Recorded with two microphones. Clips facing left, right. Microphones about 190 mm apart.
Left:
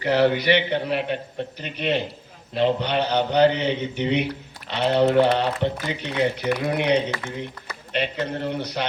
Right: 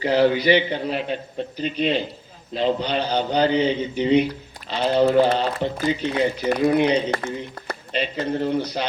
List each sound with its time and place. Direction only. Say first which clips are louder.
0.0 s a man's voice: right 1 dB; 60° left (ahead or behind)
7.1 s speech: right 4 dB; 55° right (ahead or behind)
7.9 s a man's voice: right 2 dB; 60° left (ahead or behind)